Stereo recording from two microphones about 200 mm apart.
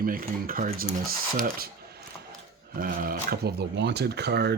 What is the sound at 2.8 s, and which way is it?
Speech, 45° right (ahead or behind).